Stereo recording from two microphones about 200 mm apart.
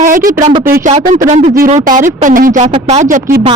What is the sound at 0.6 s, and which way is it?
Speech, 10° right (ahead or behind).